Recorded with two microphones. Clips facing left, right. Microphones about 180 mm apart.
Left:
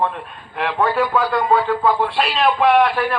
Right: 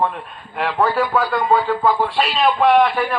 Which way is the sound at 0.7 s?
10° right (ahead or behind).